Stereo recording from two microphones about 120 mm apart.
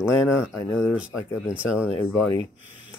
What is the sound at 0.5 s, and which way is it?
Speech, 25° left (ahead or behind).